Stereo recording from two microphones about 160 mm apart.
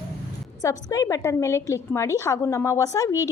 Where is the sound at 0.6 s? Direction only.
20° left (ahead or behind).